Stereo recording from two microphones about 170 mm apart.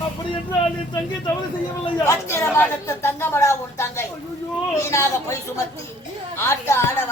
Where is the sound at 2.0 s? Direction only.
15° left (ahead or behind).